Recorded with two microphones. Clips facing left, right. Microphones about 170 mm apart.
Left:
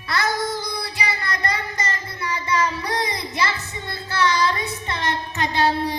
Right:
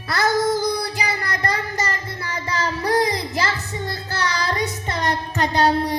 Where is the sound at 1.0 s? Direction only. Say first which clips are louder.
Right 2 dB; 40° right (ahead or behind).